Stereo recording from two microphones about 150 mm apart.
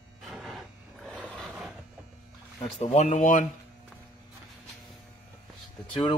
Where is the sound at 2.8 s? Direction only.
55° left (ahead or behind).